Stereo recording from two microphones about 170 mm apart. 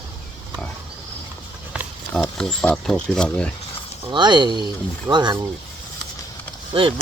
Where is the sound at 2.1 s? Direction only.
5° left (ahead or behind).